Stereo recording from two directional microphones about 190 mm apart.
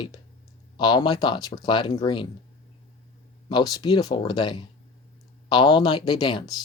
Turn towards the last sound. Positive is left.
turn(degrees=20)  # may be behind; listen again after turning